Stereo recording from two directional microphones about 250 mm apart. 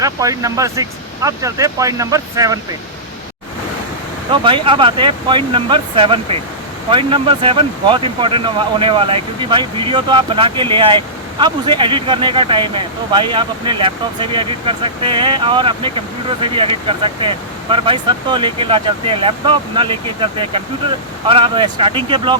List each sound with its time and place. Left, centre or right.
0.0 s speech: centre
4.3 s speech: right